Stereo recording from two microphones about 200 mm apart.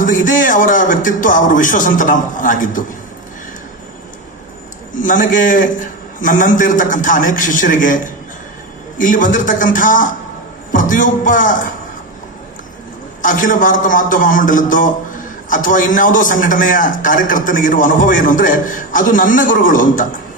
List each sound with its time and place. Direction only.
0.0 s a man's voice: 40° left (ahead or behind)
4.9 s a man's voice: 40° left (ahead or behind)
13.2 s a man's voice: 40° left (ahead or behind)